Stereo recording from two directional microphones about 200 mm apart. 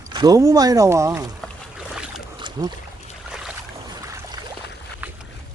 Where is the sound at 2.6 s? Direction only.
20° right (ahead or behind).